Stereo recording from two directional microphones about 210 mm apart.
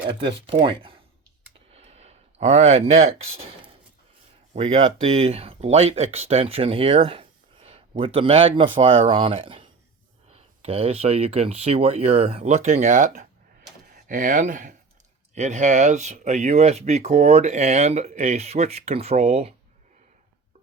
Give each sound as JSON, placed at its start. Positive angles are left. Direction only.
{"t": 0.1, "sound": "speech", "side_deg": -25}
{"t": 1.7, "sound": "a sound", "side_deg": -30}
{"t": 4.5, "sound": "speech", "side_deg": -30}